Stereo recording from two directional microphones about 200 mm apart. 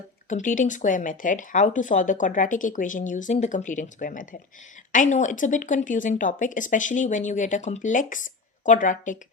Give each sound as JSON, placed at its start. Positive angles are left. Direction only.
{"t": 0.3, "sound": "speech", "side_deg": 40}